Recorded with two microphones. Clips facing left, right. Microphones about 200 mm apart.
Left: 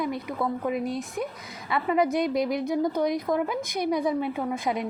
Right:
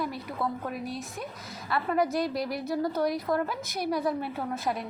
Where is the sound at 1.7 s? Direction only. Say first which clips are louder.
Left 3 dB; 20° left (ahead or behind).